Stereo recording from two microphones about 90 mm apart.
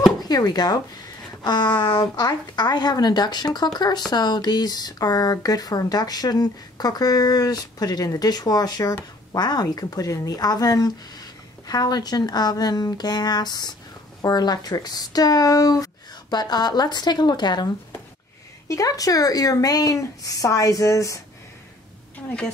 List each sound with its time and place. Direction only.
0.2 s a woman's voice: 45° left (ahead or behind)
18.7 s speech: 40° left (ahead or behind)